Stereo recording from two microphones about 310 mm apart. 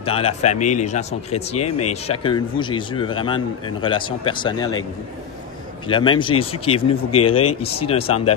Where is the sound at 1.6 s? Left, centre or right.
Left.